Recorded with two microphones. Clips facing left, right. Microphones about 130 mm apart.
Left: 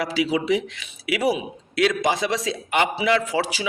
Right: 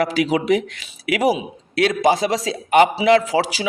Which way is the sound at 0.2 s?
50° right (ahead or behind).